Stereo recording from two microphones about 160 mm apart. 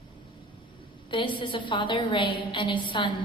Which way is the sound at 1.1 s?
30° left (ahead or behind).